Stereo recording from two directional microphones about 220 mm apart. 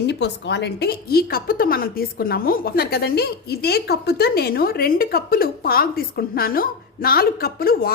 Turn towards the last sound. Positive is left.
turn(degrees=45)  # may be behind; listen again after turning